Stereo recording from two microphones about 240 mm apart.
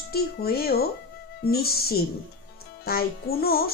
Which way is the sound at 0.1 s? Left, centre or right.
Left.